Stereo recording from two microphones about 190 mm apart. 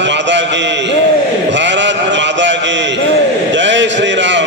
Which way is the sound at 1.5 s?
70° right (ahead or behind).